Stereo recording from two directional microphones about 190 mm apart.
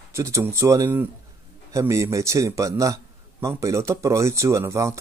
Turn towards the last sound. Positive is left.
turn(degrees=-15)  # may be behind; listen again after turning